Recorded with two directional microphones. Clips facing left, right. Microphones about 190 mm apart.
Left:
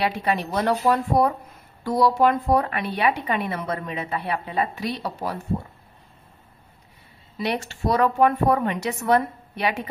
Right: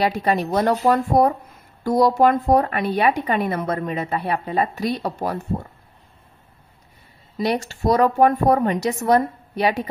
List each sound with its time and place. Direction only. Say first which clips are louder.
0.0 s a woman's voice: right 4 dB; 40° right (ahead or behind)
7.3 s speech: right 4 dB; 40° right (ahead or behind)